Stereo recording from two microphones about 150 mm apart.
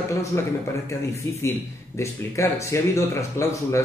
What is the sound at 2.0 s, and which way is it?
Speech, 20° left (ahead or behind).